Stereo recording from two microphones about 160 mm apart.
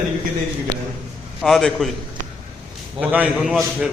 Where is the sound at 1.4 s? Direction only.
Centre (ahead or behind).